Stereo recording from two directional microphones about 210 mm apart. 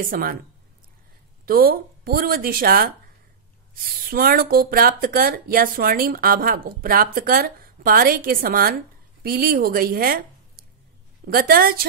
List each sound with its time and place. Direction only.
0.0 s speech: 40° right (ahead or behind)
1.4 s a woman's voice: 45° right (ahead or behind)